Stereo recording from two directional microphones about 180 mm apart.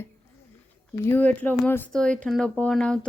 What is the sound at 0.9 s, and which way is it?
Speech, 10° left (ahead or behind).